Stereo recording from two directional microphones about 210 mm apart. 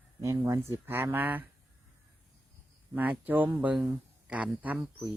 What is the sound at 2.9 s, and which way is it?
Speech, 10° right (ahead or behind).